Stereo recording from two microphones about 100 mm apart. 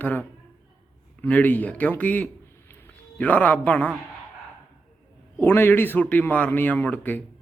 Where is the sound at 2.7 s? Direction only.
20° left (ahead or behind).